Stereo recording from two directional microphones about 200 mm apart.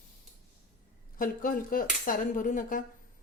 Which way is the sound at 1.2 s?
45° left (ahead or behind).